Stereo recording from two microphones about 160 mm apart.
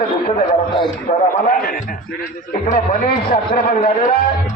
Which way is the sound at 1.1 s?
55° left (ahead or behind).